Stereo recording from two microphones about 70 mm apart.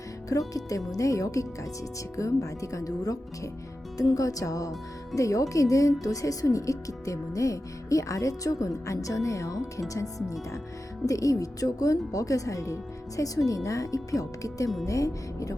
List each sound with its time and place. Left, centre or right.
0.3 s speech: left